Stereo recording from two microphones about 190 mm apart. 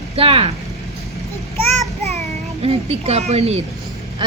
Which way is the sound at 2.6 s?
30° right (ahead or behind).